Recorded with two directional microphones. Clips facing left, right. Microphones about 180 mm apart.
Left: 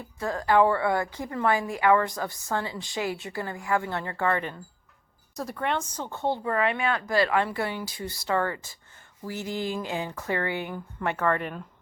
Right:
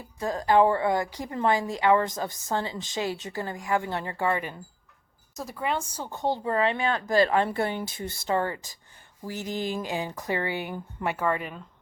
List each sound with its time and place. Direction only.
0.2 s a woman's voice: 20° right (ahead or behind)
5.4 s speech: centre (ahead or behind)
6.4 s a woman's voice: 30° right (ahead or behind); by 11.6 s 5° right (ahead or behind)